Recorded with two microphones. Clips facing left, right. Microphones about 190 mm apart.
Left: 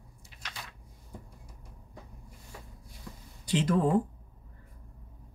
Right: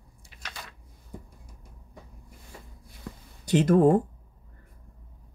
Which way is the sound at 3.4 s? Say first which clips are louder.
Right 7 dB; 45° right (ahead or behind).